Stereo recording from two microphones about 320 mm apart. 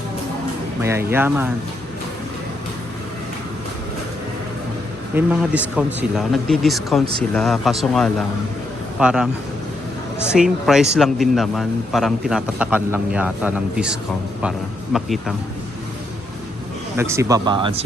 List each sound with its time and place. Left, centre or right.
0.8 s speech: centre
5.1 s a man's voice: centre
17.0 s speech: centre